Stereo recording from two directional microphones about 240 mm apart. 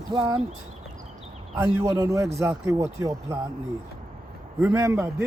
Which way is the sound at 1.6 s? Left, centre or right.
Centre.